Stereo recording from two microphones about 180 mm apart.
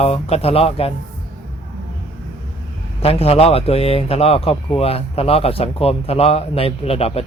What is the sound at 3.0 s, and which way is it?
A man's voice, 35° left (ahead or behind).